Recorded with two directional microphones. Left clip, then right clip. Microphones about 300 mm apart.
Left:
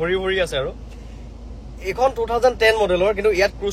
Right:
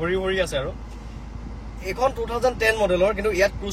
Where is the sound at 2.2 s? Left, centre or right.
Centre.